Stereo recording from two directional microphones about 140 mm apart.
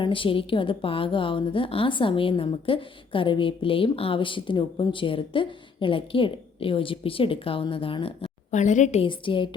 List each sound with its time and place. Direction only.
0.0 s a woman's voice: 35° left (ahead or behind)
8.5 s a woman's voice: 60° left (ahead or behind)
9.0 s a woman's voice: 35° left (ahead or behind)